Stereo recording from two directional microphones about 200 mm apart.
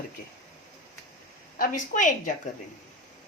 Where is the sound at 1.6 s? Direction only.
40° left (ahead or behind).